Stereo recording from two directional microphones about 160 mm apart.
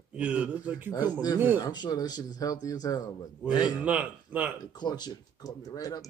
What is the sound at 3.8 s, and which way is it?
Speech, 10° right (ahead or behind).